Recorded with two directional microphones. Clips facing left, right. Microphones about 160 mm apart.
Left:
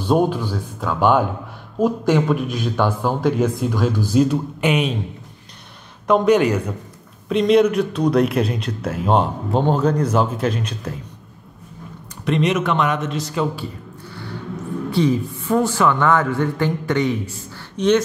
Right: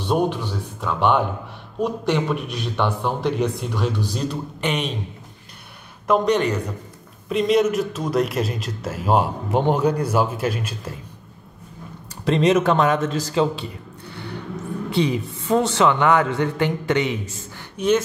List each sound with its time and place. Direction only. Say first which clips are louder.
0.0 s a man's voice: left 3 dB; centre (ahead or behind)
6.0 s a man's voice: left 4 dB; 5° left (ahead or behind)
12.3 s a man's voice: right 2 dB; 30° right (ahead or behind)
14.9 s a woman's voice: left 3 dB; 20° right (ahead or behind)
17.7 s speech: left 3 dB; 5° right (ahead or behind)